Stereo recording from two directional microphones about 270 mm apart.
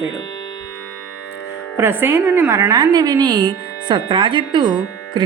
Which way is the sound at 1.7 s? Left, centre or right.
Centre.